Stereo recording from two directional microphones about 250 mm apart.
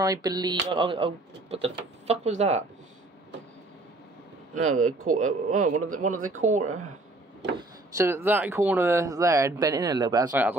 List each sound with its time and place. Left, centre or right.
0.0 s speech: centre
4.6 s speech: right
7.5 s speech: centre